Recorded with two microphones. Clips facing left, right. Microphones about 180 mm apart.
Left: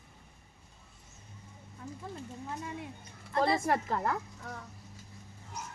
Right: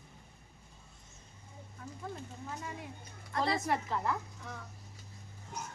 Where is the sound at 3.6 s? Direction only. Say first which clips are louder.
Left 3 dB; 50° left (ahead or behind).